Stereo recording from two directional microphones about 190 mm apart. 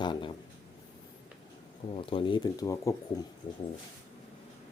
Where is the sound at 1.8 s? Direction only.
30° left (ahead or behind).